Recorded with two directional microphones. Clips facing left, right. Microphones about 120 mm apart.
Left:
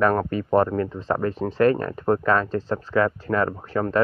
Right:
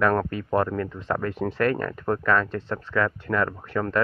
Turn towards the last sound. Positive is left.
turn(degrees=30)  # may be behind; listen again after turning